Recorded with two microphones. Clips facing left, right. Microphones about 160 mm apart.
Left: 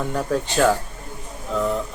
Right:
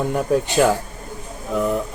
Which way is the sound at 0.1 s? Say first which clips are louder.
Right 4 dB; 15° right (ahead or behind).